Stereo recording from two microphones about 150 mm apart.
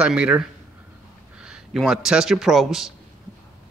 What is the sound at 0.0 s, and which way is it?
A man's voice, 5° right (ahead or behind).